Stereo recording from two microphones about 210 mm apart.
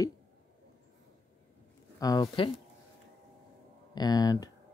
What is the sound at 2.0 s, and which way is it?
Speech, 20° left (ahead or behind).